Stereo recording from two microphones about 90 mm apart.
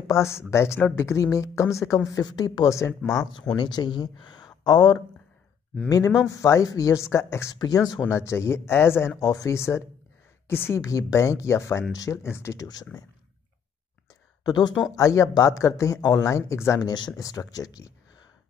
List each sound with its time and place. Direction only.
0.0 s a woman's voice: 35° left (ahead or behind)
3.0 s speech: 5° left (ahead or behind)
3.5 s speech: 55° left (ahead or behind)
5.9 s speech: 40° left (ahead or behind)
7.5 s a woman's voice: 45° left (ahead or behind)
8.1 s speech: 30° left (ahead or behind)
9.2 s a woman's voice: 40° left (ahead or behind)
10.8 s speech: 40° left (ahead or behind)
12.9 s a woman's voice: 50° left (ahead or behind)
14.4 s speech: 50° left (ahead or behind)
15.0 s speech: 35° left (ahead or behind)
16.8 s speech: 55° left (ahead or behind)
17.2 s speech: 40° left (ahead or behind)